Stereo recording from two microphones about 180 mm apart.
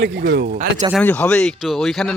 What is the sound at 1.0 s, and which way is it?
Speech, 10° left (ahead or behind).